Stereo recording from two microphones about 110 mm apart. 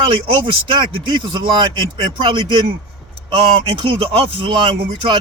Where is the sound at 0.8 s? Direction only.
45° right (ahead or behind).